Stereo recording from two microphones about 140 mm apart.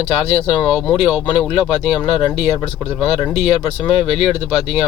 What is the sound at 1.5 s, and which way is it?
Speech, 45° left (ahead or behind).